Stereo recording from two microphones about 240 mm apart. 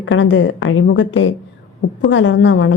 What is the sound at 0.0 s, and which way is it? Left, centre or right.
A woman's voice, left.